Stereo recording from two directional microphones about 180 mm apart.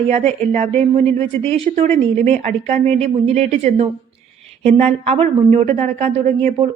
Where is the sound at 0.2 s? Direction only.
35° right (ahead or behind).